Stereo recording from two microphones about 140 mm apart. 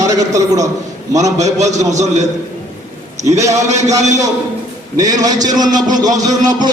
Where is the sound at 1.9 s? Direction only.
55° right (ahead or behind).